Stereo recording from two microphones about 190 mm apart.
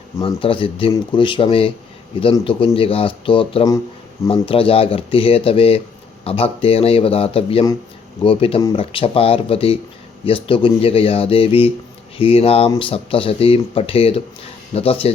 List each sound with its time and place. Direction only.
0.2 s a man's voice: 30° left (ahead or behind)